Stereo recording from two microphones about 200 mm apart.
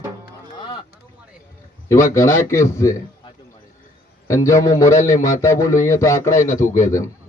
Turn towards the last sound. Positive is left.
turn(degrees=15)  # may be behind; listen again after turning